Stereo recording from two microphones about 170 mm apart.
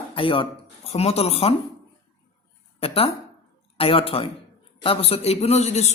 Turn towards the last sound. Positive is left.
turn(degrees=40)  # may be behind; listen again after turning